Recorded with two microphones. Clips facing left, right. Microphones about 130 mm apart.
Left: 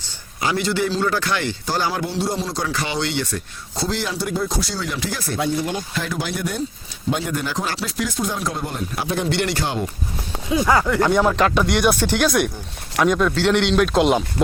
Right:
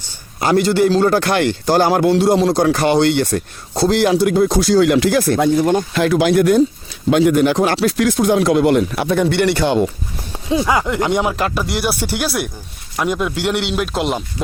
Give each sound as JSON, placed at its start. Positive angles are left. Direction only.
{"t": 0.3, "sound": "a man's voice", "side_deg": -45}
{"t": 2.0, "sound": "speech", "side_deg": -90}
{"t": 10.5, "sound": "speech", "side_deg": -15}
{"t": 11.3, "sound": "speech", "side_deg": -5}